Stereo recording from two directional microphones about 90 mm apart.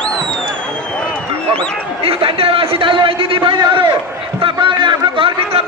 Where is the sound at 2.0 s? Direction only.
85° right.